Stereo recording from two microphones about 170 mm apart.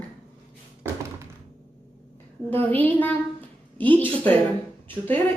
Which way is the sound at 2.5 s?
10° left (ahead or behind).